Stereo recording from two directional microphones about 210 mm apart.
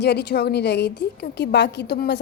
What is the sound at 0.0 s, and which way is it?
A woman's voice, 55° left (ahead or behind).